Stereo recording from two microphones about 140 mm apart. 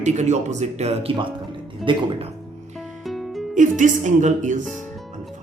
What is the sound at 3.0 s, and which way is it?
Music, centre (ahead or behind).